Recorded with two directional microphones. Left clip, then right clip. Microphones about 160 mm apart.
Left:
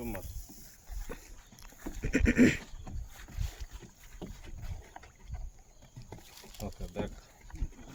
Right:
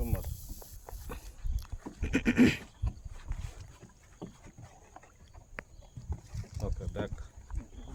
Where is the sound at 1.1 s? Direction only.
Centre (ahead or behind).